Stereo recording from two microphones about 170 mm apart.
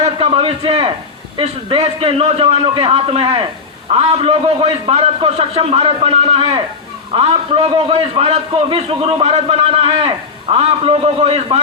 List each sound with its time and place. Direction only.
0.0 s a man's voice: 35° right (ahead or behind)